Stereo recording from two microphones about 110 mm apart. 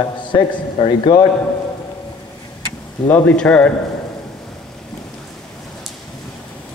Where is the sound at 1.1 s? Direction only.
35° left (ahead or behind).